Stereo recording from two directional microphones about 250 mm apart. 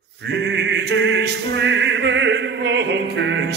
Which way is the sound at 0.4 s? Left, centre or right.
Right.